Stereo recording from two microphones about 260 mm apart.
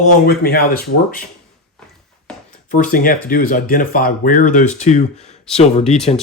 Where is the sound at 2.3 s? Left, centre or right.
Centre.